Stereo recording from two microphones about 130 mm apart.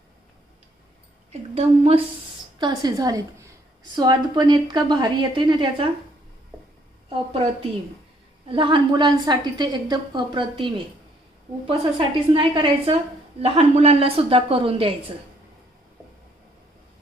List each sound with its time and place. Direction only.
1.3 s a woman's voice: 55° right (ahead or behind)
2.6 s a woman's voice: 35° right (ahead or behind)
8.4 s a woman's voice: 40° right (ahead or behind)
13.4 s a woman's voice: 50° right (ahead or behind)